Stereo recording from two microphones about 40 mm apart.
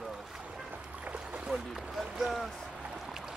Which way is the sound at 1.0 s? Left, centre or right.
Right.